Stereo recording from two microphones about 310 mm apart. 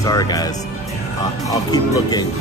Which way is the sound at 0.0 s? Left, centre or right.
Centre.